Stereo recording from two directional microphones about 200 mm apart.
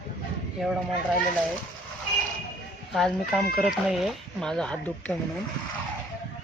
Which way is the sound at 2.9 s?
Centre (ahead or behind).